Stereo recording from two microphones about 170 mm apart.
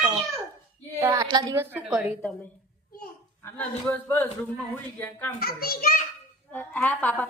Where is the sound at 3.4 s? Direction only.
10° left (ahead or behind).